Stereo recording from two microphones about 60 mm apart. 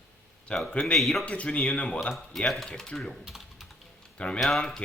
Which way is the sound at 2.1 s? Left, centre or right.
Centre.